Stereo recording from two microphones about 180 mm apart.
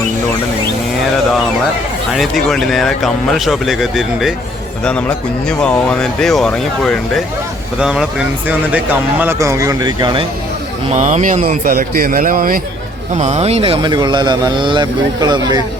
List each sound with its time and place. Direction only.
2.1 s speech: centre (ahead or behind); by 10.2 s 25° right (ahead or behind)
10.9 s a man's voice: 40° right (ahead or behind)
13.1 s speech: 35° right (ahead or behind); by 15.6 s 20° right (ahead or behind)